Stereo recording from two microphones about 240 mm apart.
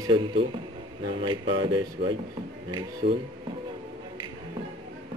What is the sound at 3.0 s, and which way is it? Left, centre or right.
Speech, right.